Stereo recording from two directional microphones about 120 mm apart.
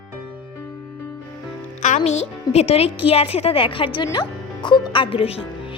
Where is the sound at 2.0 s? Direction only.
65° left (ahead or behind); by 4.0 s 45° left (ahead or behind).